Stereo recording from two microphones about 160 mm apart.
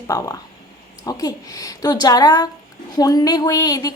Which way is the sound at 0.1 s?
20° left (ahead or behind).